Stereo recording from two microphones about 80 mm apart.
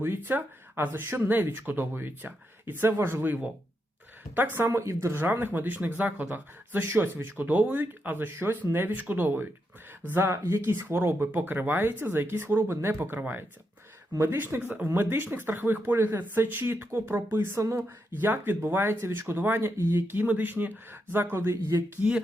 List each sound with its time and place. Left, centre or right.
0.0 s speech: right
4.5 s speech: right
18.2 s speech: right